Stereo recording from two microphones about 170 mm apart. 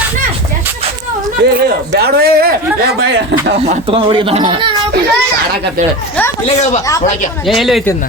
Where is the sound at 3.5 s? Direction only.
35° right (ahead or behind).